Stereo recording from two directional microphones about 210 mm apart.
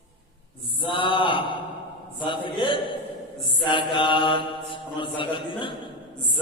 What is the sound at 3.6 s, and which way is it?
Mantra, 25° left (ahead or behind).